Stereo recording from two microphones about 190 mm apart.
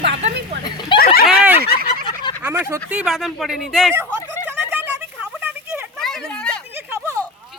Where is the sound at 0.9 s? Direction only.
55° left (ahead or behind).